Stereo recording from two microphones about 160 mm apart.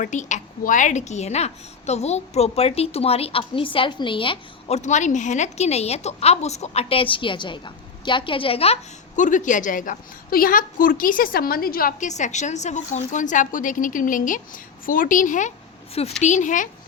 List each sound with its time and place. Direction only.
0.0 s a woman's voice: 50° left (ahead or behind); by 4.8 s 30° left (ahead or behind)
4.8 s a woman's voice: 50° left (ahead or behind)